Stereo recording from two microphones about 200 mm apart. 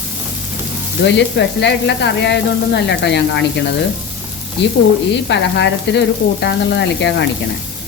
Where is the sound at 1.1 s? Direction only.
60° left (ahead or behind).